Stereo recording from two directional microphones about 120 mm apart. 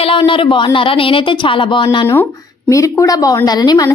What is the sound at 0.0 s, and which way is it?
Speech, 50° left (ahead or behind).